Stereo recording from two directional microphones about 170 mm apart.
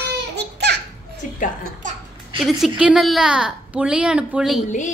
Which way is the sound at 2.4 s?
Centre (ahead or behind).